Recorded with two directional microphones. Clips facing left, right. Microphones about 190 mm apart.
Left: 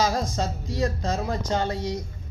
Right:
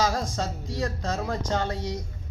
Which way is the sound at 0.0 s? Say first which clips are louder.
Left 2 dB; 10° left (ahead or behind).